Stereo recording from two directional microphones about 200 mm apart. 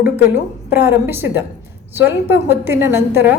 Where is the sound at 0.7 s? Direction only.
10° right (ahead or behind).